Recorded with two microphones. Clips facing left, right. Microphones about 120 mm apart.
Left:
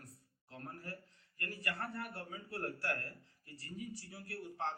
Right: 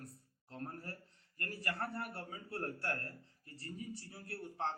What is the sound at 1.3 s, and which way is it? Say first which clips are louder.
Speech: right 1 dB; 40° right (ahead or behind).